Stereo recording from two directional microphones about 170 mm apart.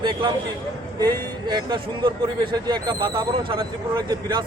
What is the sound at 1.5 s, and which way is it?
Speech, 25° right (ahead or behind).